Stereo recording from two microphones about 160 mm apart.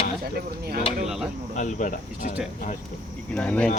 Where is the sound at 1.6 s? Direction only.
55° left (ahead or behind).